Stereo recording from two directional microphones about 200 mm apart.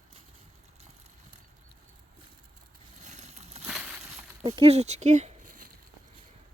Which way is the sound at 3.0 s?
35° right (ahead or behind).